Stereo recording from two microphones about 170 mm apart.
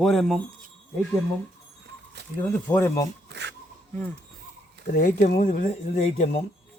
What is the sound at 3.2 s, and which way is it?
Zipper, 85° right.